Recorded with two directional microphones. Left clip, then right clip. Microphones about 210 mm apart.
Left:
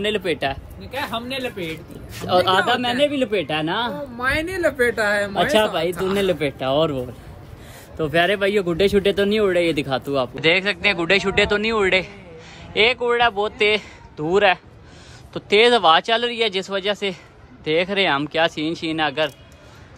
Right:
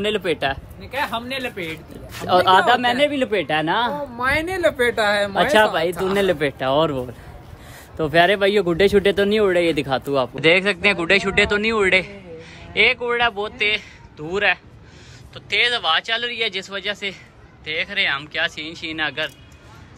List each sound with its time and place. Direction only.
0.0 s speech: centre (ahead or behind)
5.5 s speech: 30° right (ahead or behind)
5.9 s speech: centre (ahead or behind)
6.4 s speech: 25° right (ahead or behind)
8.0 s speech: 5° left (ahead or behind)
15.3 s speech: 25° left (ahead or behind)